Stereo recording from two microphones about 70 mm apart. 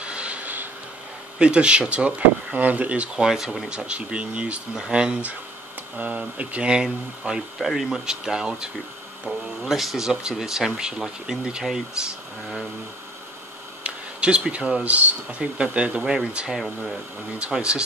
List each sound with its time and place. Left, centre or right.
0.0 s a sound: centre
1.4 s speech: centre
3.3 s speech: centre
13.8 s speech: centre
16.0 s speech: centre
17.4 s speech: centre